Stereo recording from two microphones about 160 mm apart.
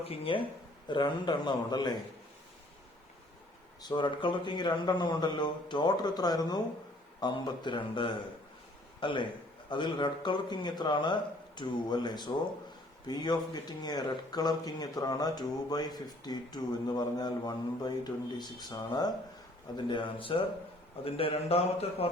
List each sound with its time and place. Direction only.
0.0 s speech: 35° left (ahead or behind)
3.8 s a man's voice: 30° left (ahead or behind)